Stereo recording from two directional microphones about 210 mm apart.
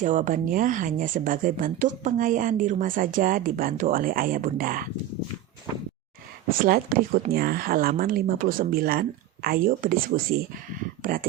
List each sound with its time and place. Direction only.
0.0 s a woman's voice: 40° right (ahead or behind)
6.6 s speech: 45° right (ahead or behind)